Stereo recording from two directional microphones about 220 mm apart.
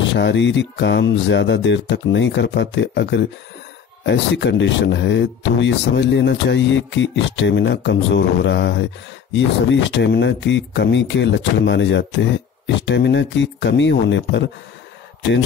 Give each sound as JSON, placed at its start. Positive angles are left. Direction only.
{"t": 0.1, "sound": "speech", "side_deg": 55}